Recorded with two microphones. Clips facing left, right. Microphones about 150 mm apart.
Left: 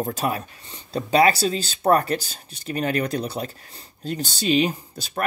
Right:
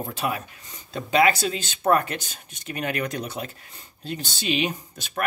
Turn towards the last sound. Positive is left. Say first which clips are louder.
# left 2 dB
turn(degrees=35)  # may be behind; listen again after turning